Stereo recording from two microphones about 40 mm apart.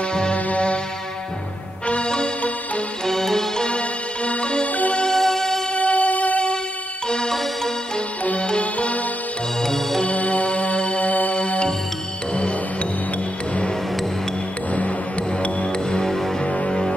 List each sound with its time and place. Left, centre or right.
0.1 s music: left
2.0 s music: left
3.1 s music: centre
3.6 s music: left
5.1 s music: centre
5.8 s music: left
7.1 s music: centre
8.2 s music: left
9.6 s music: centre
10.0 s music: left
14.7 s music: left
15.6 s music: left